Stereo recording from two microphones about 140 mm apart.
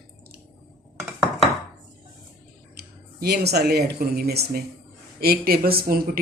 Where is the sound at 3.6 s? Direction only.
90° right.